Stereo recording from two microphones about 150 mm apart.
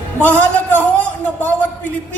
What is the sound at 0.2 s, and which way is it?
Speech, 10° left (ahead or behind).